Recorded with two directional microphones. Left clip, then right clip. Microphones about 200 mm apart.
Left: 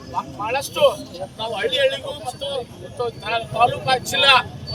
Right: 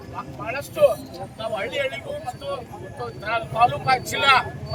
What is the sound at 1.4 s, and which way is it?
Speech, 5° right (ahead or behind).